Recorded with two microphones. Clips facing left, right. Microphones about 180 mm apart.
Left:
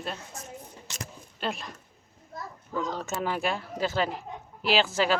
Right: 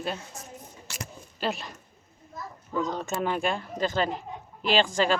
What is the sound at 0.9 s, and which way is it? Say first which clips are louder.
Single-lens reflex camera: right 1 dB; 15° left (ahead or behind).